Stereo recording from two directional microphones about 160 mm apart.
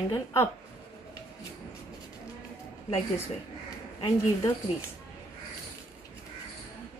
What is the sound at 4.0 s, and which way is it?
Speech, 30° left (ahead or behind).